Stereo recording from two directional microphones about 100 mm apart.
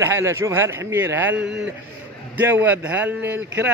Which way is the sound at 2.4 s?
20° right (ahead or behind).